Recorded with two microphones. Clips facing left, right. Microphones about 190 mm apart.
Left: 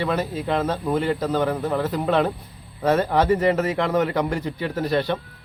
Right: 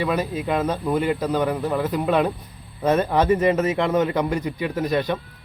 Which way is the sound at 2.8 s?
20° right (ahead or behind).